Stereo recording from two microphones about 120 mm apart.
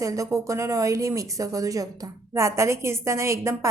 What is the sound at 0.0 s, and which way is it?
A woman's voice, 25° right (ahead or behind).